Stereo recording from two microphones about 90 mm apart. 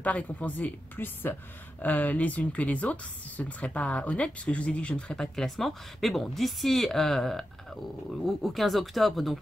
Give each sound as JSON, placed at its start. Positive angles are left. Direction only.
{"t": 0.0, "sound": "speech", "side_deg": 15}